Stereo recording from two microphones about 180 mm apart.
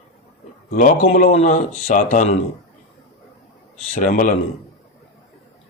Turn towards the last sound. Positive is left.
turn(degrees=45)  # may be behind; listen again after turning